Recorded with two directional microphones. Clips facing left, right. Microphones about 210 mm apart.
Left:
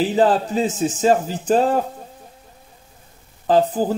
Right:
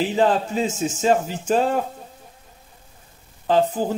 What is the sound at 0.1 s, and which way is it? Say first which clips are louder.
Speech: left 2 dB; 35° left (ahead or behind).